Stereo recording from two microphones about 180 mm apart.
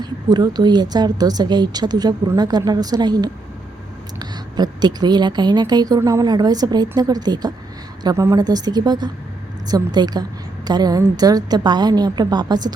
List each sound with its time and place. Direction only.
0.0 s a woman's voice: 25° right (ahead or behind)